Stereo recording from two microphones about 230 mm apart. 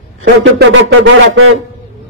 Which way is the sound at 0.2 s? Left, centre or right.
Right.